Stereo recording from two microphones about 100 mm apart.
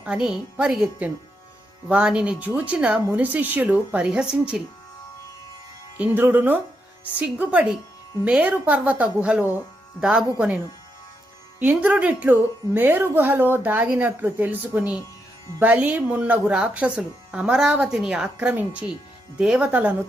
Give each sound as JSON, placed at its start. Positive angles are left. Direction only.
{"t": 0.0, "sound": "a woman's voice", "side_deg": -10}
{"t": 6.0, "sound": "a woman's voice", "side_deg": -20}
{"t": 11.6, "sound": "a woman's voice", "side_deg": -15}